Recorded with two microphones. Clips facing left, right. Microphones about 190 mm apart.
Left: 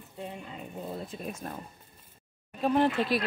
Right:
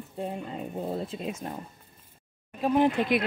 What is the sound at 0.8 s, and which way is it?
Speech, 40° right (ahead or behind).